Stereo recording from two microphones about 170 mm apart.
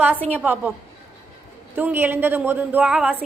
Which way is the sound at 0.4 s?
10° right (ahead or behind).